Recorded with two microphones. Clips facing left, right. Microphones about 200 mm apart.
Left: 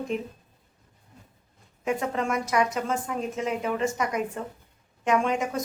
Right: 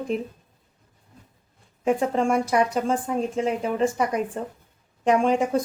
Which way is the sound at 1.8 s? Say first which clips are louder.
Right 5 dB; 30° right (ahead or behind).